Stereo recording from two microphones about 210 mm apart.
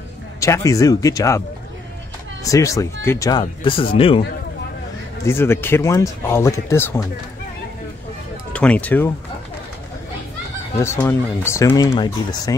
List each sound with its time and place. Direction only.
0.4 s speech: 15° left (ahead or behind)
2.4 s speech: 15° left (ahead or behind)
5.2 s speech: 10° left (ahead or behind)
8.5 s speech: 5° left (ahead or behind)
10.8 s speech: 10° left (ahead or behind)